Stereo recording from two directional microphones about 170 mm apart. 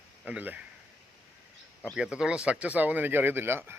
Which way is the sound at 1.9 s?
5° right (ahead or behind).